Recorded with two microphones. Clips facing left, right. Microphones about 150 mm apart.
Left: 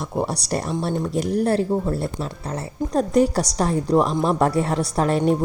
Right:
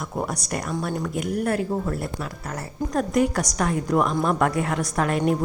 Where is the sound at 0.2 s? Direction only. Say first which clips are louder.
Left 4 dB; 30° left (ahead or behind).